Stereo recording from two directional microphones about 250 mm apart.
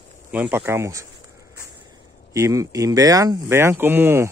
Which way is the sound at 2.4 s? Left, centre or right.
Centre.